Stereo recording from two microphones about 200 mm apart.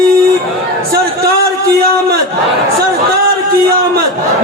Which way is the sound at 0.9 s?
50° right (ahead or behind).